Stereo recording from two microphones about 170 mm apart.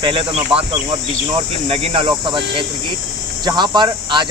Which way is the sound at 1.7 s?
30° right (ahead or behind).